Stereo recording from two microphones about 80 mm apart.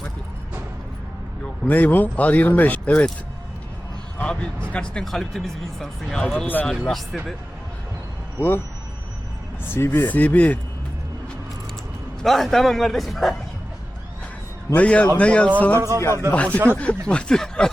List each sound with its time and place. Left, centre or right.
1.6 s speech: left
4.2 s speech: centre
6.8 s a man's voice: centre
8.4 s speech: left
9.7 s speech: left
12.2 s a man's voice: centre
14.7 s speech: centre
16.0 s speech: left
16.3 s speech: centre